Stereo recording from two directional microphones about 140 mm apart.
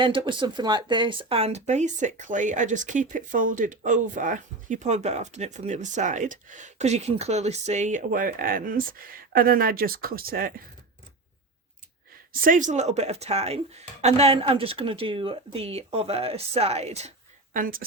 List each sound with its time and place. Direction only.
0.0 s speech: 35° right (ahead or behind); by 10.5 s 90° right
12.3 s speech: 85° right; by 17.1 s 50° right (ahead or behind)
17.5 s speech: 85° right